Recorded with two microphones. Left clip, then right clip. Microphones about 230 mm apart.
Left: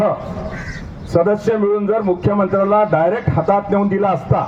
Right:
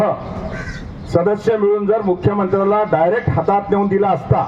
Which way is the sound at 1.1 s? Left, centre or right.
Right.